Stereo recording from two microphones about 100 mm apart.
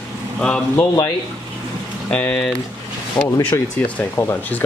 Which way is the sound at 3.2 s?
15° left (ahead or behind).